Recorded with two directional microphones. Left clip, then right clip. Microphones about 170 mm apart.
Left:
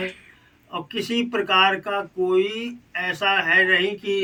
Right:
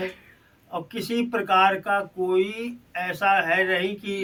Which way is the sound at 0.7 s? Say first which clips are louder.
Left 2 dB; 10° right (ahead or behind).